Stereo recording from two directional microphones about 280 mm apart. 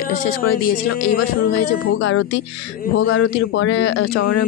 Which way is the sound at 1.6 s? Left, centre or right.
Left.